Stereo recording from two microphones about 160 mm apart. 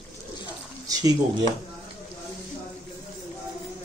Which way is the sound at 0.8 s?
20° right (ahead or behind).